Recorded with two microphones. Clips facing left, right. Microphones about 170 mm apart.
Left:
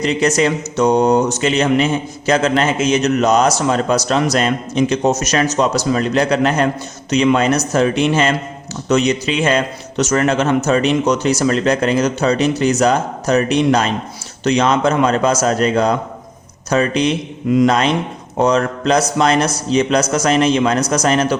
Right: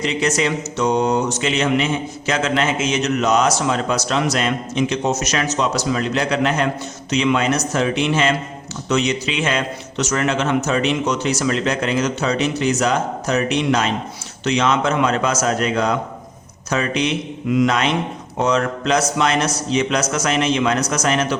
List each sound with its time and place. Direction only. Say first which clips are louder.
0.0 s speech: left 5 dB; 40° left (ahead or behind)